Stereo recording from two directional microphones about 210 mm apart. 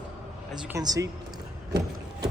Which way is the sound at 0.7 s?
15° right (ahead or behind).